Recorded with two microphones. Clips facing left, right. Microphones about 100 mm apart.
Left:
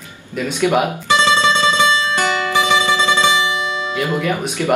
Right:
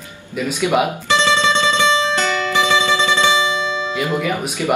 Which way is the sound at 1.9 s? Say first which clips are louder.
Right 1 dB; 20° right (ahead or behind).